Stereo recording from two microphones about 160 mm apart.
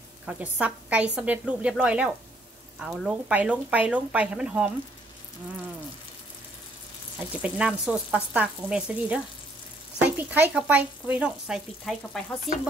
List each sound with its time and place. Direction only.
0.3 s speech: 10° right (ahead or behind)
7.2 s speech: 5° right (ahead or behind)
12.5 s stir: 5° right (ahead or behind)